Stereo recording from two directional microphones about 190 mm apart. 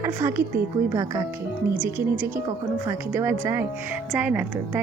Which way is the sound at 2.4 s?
15° right (ahead or behind).